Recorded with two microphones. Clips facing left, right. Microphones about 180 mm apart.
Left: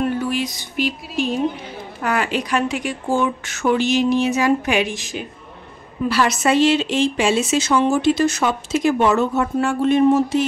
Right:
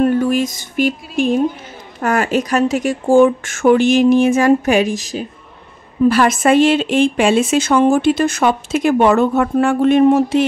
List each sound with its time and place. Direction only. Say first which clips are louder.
0.0 s music: right 7 dB; 45° right (ahead or behind)
2.0 s speech: right 5 dB; 45° right (ahead or behind)
6.0 s a woman's voice: right 6 dB; 50° right (ahead or behind)